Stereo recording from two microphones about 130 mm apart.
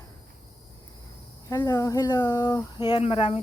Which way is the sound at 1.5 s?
25° left (ahead or behind).